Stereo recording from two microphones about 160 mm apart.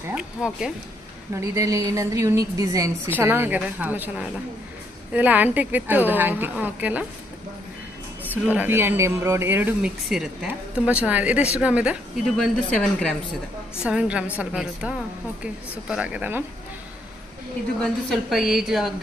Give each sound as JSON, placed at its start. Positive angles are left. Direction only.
{"t": 0.1, "sound": "a woman's voice", "side_deg": -5}
{"t": 1.3, "sound": "speech", "side_deg": -20}
{"t": 8.3, "sound": "speech", "side_deg": -10}
{"t": 12.4, "sound": "a woman's voice", "side_deg": 5}
{"t": 13.8, "sound": "a woman's voice", "side_deg": -5}
{"t": 17.8, "sound": "a woman's voice", "side_deg": 0}